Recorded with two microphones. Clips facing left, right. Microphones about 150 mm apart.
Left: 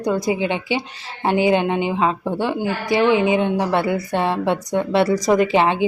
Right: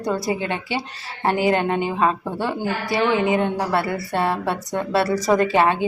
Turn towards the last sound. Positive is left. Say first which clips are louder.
# left 1 dB
turn(degrees=20)  # may be behind; listen again after turning